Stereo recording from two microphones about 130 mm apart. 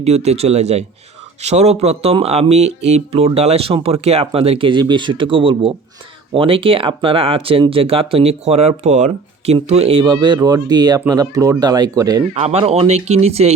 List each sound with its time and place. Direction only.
0.0 s speech: 55° right (ahead or behind)
9.6 s speech: 55° right (ahead or behind)
10.0 s speech: 35° right (ahead or behind)
12.3 s speech: 55° right (ahead or behind)